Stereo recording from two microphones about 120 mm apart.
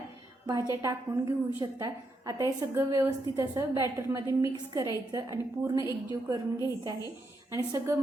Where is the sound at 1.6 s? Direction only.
30° right (ahead or behind).